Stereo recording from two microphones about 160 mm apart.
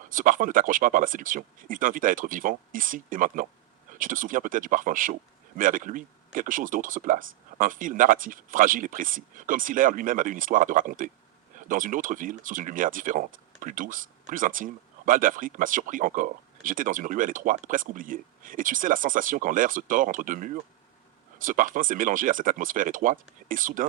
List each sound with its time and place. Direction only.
0.1 s speech: 55° right (ahead or behind)